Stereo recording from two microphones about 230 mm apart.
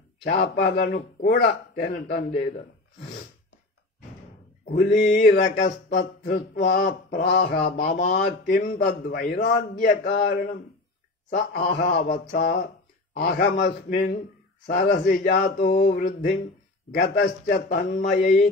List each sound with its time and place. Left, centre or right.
0.2 s a man's voice: left
5.0 s a man's voice: left